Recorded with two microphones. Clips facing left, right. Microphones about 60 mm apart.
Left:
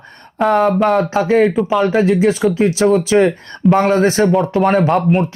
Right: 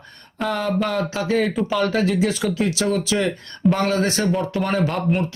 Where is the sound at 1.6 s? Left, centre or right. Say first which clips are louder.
Left 6 dB; centre; by 4.3 s left.